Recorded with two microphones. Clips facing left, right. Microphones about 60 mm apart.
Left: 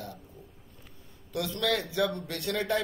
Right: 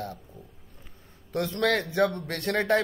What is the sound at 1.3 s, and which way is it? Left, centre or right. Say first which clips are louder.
Speech: right 4 dB; right.